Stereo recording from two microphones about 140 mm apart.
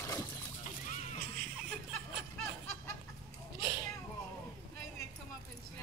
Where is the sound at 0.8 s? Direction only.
65° left (ahead or behind).